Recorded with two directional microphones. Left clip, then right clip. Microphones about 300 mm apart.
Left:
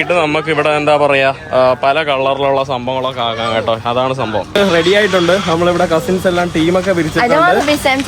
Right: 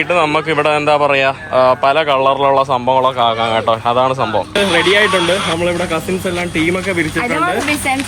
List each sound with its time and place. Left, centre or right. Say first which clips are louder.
0.1 s a man's voice: right 1 dB; centre
4.8 s speech: even; left
5.3 s speech: left 3 dB; centre